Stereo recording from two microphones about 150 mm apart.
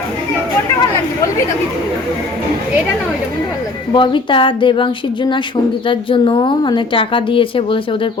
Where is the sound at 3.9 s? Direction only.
30° left (ahead or behind).